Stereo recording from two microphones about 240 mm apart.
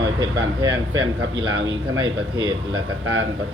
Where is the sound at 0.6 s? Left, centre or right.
Centre.